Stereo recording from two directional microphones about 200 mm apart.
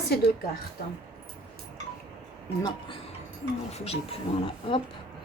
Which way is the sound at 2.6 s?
20° left (ahead or behind).